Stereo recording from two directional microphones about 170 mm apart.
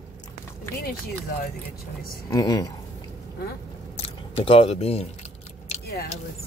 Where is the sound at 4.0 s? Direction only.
35° left (ahead or behind).